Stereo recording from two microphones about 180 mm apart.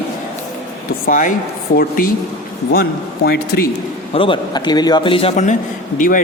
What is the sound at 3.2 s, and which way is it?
Speech, 60° left (ahead or behind).